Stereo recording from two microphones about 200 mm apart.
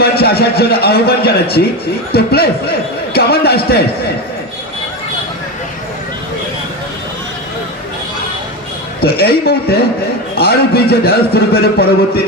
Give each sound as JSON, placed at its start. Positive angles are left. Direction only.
{"t": 0.0, "sound": "a man's voice", "side_deg": 50}
{"t": 9.0, "sound": "a man's voice", "side_deg": 50}